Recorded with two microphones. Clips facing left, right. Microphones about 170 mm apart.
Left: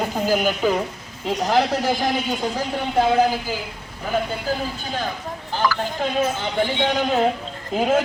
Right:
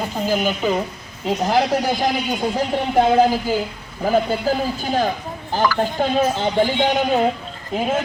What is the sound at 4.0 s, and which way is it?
Speech, 35° right (ahead or behind).